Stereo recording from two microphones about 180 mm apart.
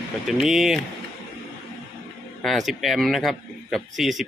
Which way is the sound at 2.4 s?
Centre (ahead or behind).